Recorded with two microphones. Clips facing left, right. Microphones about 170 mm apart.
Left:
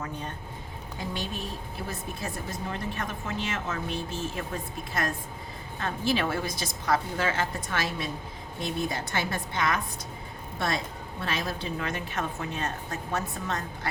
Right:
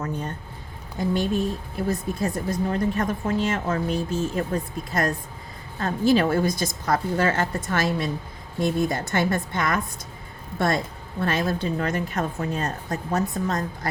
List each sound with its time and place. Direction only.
0.9 s a woman's voice: 45° right (ahead or behind)